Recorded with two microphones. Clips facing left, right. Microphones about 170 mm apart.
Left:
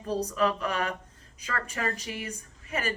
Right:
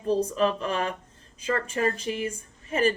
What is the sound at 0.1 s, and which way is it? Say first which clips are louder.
Speech: right 4 dB; 25° right (ahead or behind).